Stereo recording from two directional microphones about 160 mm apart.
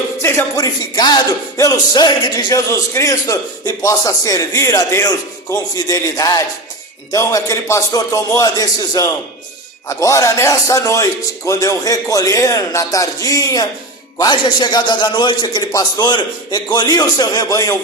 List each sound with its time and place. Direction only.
0.2 s speech: 15° left (ahead or behind)